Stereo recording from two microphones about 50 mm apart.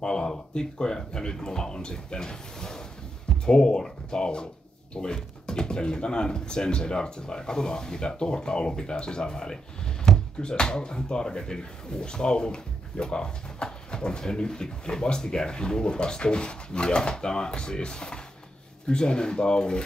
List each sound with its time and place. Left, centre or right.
0.0 s speech: centre